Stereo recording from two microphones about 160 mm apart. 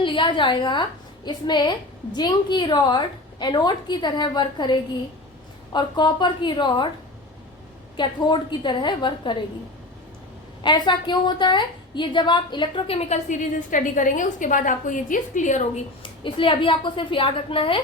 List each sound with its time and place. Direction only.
0.0 s a woman's voice: 30° left (ahead or behind)
7.9 s a woman's voice: 30° left (ahead or behind)
10.6 s a woman's voice: 30° left (ahead or behind); by 15.8 s 50° left (ahead or behind)
16.2 s a woman's voice: 30° left (ahead or behind)